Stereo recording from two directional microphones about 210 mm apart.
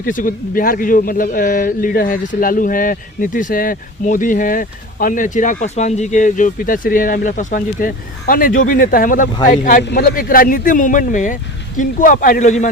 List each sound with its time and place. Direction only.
0.0 s a man's voice: 40° left (ahead or behind)